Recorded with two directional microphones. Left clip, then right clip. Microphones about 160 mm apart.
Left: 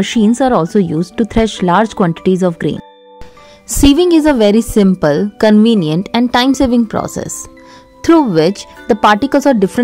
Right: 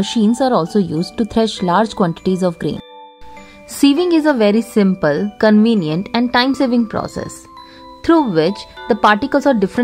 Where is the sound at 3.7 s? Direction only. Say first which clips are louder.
Left 4 dB; 40° left (ahead or behind).